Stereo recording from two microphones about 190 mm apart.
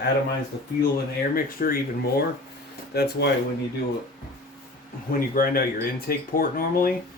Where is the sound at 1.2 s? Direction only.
50° left (ahead or behind).